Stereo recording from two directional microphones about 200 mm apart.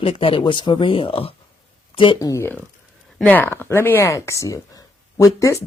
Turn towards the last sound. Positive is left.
turn(degrees=15)  # may be behind; listen again after turning